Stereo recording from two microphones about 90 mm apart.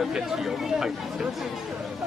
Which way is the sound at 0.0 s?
5° right (ahead or behind).